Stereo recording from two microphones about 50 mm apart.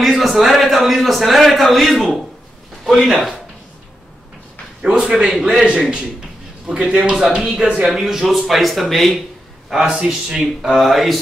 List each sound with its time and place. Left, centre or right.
0.0 s a man's voice: centre
4.8 s a man's voice: right
5.5 s a man's voice: centre
9.7 s speech: centre